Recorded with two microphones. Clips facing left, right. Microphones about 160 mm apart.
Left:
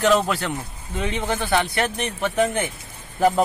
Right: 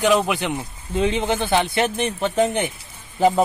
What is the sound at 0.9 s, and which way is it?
Speech, 25° right (ahead or behind).